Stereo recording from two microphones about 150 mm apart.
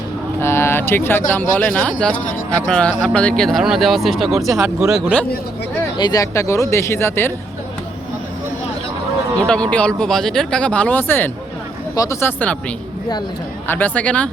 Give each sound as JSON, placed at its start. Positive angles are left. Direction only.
{"t": 0.4, "sound": "a sound", "side_deg": 15}
{"t": 1.3, "sound": "speech", "side_deg": 10}
{"t": 4.5, "sound": "speech", "side_deg": -15}
{"t": 4.9, "sound": "speech", "side_deg": -5}
{"t": 6.0, "sound": "speech", "side_deg": 25}
{"t": 9.5, "sound": "speech", "side_deg": 10}
{"t": 13.7, "sound": "speech", "side_deg": 10}